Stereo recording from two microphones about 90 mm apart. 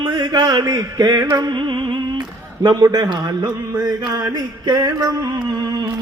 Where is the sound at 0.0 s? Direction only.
55° right (ahead or behind).